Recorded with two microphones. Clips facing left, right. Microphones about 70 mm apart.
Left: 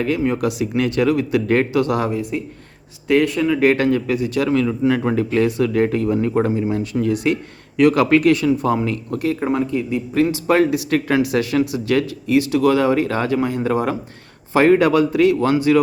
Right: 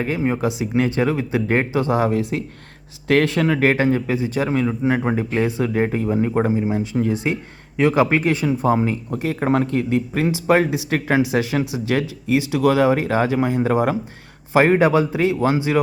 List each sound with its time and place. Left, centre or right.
0.0 s speech: right
3.7 s speech: right
9.5 s speech: right
10.2 s speech: centre